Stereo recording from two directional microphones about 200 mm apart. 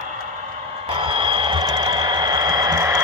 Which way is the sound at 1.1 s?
25° right (ahead or behind).